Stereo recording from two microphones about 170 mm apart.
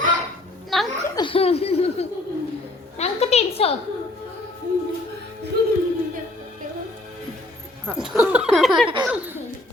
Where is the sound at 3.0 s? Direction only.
40° left (ahead or behind).